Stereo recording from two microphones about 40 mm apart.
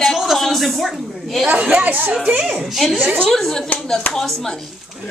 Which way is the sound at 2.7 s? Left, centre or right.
Centre.